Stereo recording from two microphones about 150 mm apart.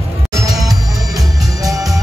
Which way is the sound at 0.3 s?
25° right (ahead or behind).